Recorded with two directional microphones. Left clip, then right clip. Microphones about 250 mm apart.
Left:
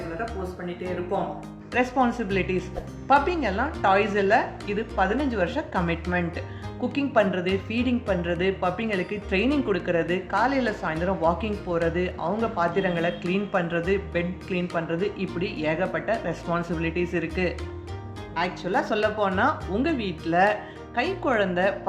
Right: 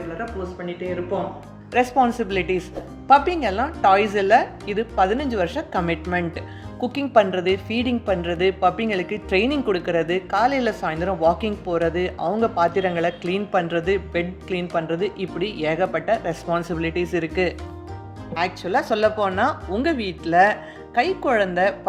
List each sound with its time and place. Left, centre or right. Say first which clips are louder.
1.7 s a woman's voice: right 5 dB; right